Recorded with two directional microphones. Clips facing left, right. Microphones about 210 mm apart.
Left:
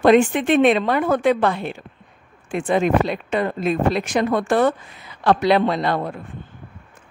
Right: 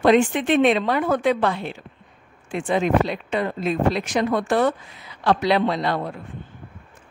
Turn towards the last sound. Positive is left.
turn(degrees=50)  # may be behind; listen again after turning